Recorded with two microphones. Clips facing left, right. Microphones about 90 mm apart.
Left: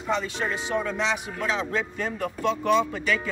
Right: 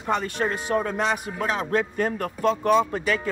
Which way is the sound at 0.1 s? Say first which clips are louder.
Right 2 dB; 50° right (ahead or behind).